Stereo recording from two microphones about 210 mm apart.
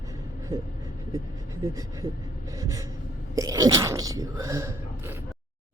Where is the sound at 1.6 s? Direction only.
15° right (ahead or behind).